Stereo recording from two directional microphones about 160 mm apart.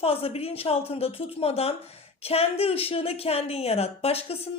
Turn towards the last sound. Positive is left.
turn(degrees=40)  # may be behind; listen again after turning